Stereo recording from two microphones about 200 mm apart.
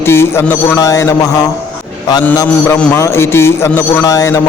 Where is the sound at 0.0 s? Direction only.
10° left (ahead or behind).